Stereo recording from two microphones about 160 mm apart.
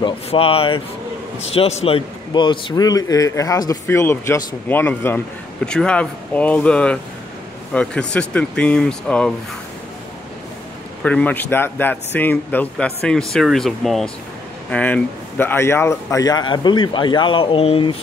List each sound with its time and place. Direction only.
0.0 s a man's voice: 35° left (ahead or behind); by 9.3 s 5° left (ahead or behind)
11.0 s a man's voice: 10° left (ahead or behind); by 17.9 s 35° left (ahead or behind)